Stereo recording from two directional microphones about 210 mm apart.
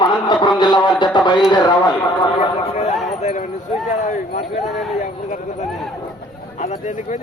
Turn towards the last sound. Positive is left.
turn(degrees=35)  # may be behind; listen again after turning